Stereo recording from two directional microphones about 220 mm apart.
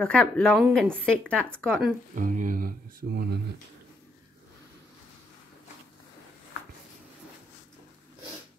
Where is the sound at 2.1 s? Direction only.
35° right (ahead or behind).